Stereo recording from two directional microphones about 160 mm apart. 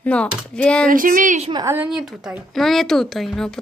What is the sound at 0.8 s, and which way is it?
Speech, 60° right (ahead or behind).